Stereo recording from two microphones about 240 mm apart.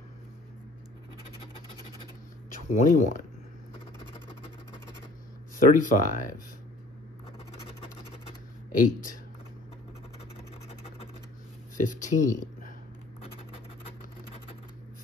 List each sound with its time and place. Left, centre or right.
2.5 s speech: left
5.7 s speech: left
8.7 s speech: left
11.7 s speech: left